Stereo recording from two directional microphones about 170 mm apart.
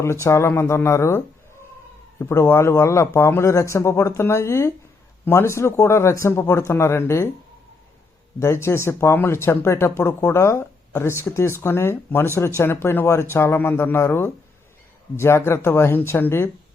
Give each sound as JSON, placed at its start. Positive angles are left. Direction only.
{"t": 0.0, "sound": "speech", "side_deg": 15}
{"t": 8.4, "sound": "speech", "side_deg": 15}